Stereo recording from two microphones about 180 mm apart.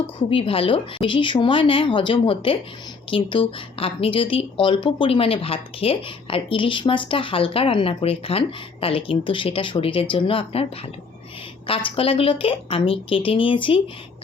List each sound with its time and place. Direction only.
0.3 s speech: 30° left (ahead or behind)
11.7 s speech: 30° left (ahead or behind)